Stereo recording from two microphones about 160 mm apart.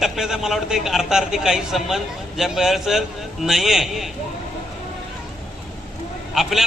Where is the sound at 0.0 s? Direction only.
5° right (ahead or behind).